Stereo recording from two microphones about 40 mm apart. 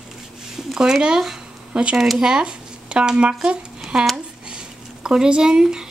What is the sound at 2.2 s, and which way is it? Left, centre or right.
Speech, centre.